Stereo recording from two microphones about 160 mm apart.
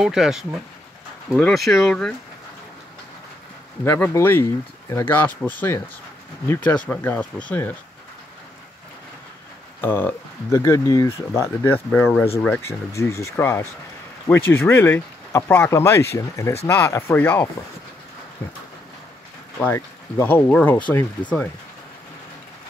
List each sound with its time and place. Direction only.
0.0 s speech: 5° right (ahead or behind)
3.8 s speech: 15° left (ahead or behind)
6.5 s speech: 10° left (ahead or behind)
9.8 s speech: 15° left (ahead or behind)
19.6 s speech: 15° left (ahead or behind)